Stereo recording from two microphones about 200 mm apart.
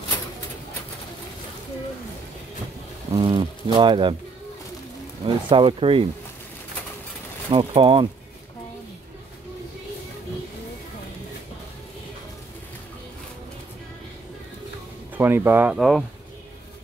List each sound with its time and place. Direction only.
3.2 s speech: 25° right (ahead or behind)
5.2 s speech: 25° right (ahead or behind)
7.5 s speech: 30° right (ahead or behind)
15.1 s speech: 10° right (ahead or behind)